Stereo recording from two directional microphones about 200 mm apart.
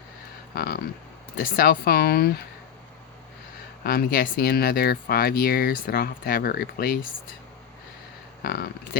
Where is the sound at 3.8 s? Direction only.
50° left (ahead or behind).